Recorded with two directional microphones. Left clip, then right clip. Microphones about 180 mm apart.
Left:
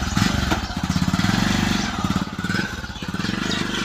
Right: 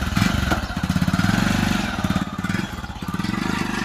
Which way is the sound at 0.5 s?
25° right (ahead or behind).